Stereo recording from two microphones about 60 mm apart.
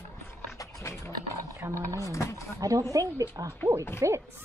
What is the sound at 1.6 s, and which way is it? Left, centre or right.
Speech, right.